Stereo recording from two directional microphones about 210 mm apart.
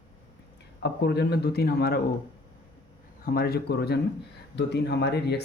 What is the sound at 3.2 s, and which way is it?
Speech, 45° left (ahead or behind).